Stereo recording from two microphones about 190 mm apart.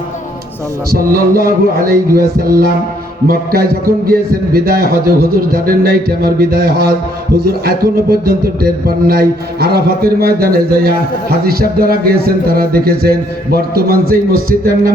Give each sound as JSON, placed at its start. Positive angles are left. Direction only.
{"t": 0.9, "sound": "a man's voice", "side_deg": -50}